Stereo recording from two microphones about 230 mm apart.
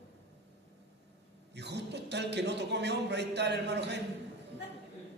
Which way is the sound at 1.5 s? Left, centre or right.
Right.